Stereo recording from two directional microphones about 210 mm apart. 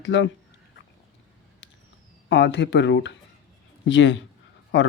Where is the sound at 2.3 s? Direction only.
60° left (ahead or behind).